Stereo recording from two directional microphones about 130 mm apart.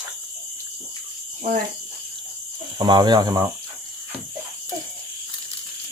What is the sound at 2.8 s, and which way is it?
Speech, 35° right (ahead or behind).